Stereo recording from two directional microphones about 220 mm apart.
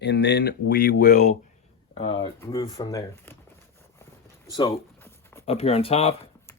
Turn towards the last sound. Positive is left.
turn(degrees=25)  # may be behind; listen again after turning